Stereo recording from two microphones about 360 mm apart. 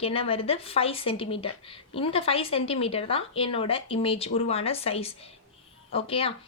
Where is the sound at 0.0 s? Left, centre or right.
Centre.